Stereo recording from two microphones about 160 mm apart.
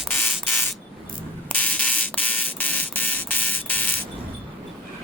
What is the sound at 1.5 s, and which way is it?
Buzzer, 10° left (ahead or behind).